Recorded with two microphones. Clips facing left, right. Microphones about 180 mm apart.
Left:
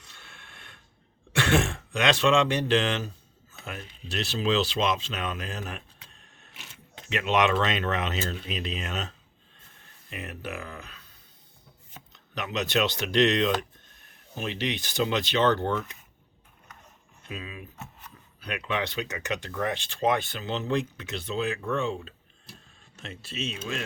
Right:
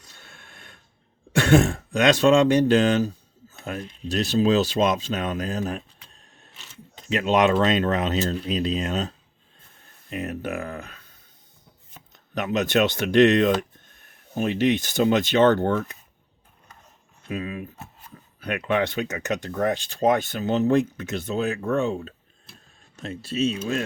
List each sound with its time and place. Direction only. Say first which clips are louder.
0.0 s printer: right 2 dB; 40° right (ahead or behind)
1.3 s speech: right 7 dB; 40° right (ahead or behind)
12.1 s speech: right 7 dB; 50° right (ahead or behind)
17.2 s speech: right 9 dB; 55° right (ahead or behind)